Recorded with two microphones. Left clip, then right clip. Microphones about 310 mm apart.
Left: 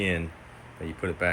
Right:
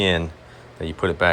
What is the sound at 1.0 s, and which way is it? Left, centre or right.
Speech, centre.